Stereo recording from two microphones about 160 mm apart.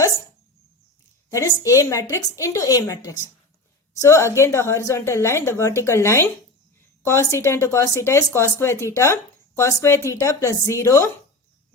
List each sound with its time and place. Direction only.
1.3 s a woman's voice: 20° left (ahead or behind)